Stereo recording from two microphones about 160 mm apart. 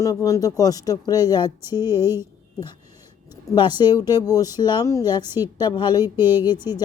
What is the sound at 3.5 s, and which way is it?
Speech, 25° left (ahead or behind).